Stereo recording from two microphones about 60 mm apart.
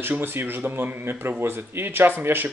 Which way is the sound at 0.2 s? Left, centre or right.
Right.